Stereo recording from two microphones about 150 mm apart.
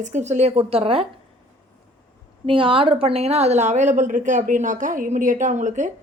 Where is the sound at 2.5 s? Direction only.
35° right (ahead or behind).